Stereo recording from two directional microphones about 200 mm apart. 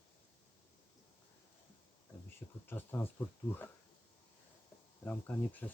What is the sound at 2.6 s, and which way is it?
Speech, 10° left (ahead or behind).